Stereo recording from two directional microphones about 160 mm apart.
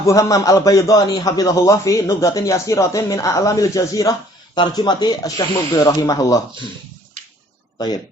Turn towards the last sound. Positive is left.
turn(degrees=25)  # may be behind; listen again after turning